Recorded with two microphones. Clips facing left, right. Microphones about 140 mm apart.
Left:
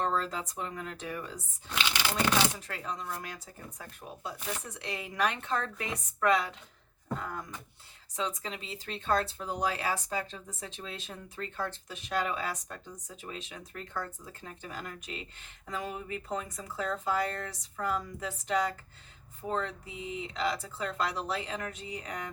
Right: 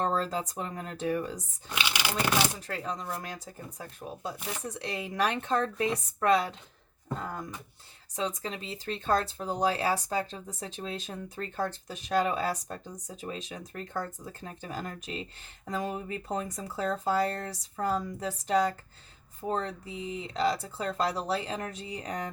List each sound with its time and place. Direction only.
0.0 s speech: 35° right (ahead or behind)
1.7 s speech: 10° right (ahead or behind)
2.6 s speech: 35° right (ahead or behind)
4.6 s speech: 35° right (ahead or behind)
8.4 s speech: 40° right (ahead or behind)